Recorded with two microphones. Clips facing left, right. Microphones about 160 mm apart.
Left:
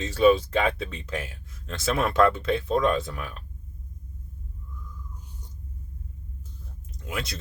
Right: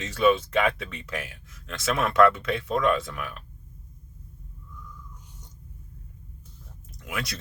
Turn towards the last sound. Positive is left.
turn(degrees=25)  # may be behind; listen again after turning